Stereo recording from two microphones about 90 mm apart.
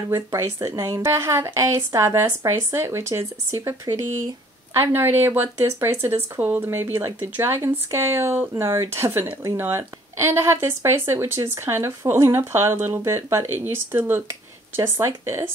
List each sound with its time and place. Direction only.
0.1 s a woman's voice: 35° right (ahead or behind)